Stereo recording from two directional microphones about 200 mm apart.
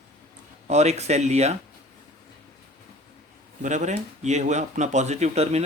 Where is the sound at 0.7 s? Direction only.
35° right (ahead or behind).